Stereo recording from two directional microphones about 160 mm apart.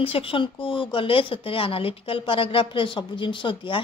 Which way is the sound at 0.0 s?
35° left (ahead or behind).